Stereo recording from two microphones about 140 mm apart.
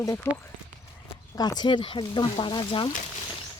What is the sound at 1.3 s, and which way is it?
Speech, 30° left (ahead or behind).